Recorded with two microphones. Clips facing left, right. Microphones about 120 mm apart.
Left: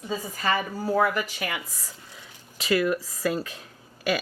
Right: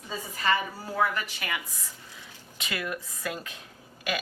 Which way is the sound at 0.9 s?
40° left (ahead or behind).